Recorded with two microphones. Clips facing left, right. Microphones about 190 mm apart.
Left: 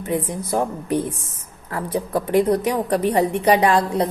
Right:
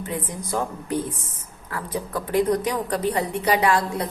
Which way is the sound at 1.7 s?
25° left (ahead or behind).